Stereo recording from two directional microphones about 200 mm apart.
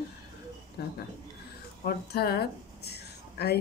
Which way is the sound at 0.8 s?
55° left (ahead or behind).